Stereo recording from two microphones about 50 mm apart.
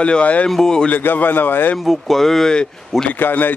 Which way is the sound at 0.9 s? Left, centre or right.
Left.